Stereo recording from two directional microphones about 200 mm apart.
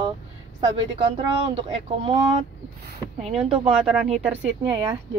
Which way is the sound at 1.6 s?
25° right (ahead or behind).